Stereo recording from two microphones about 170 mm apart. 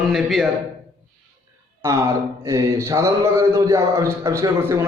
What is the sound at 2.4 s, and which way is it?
A man's voice, 15° right (ahead or behind).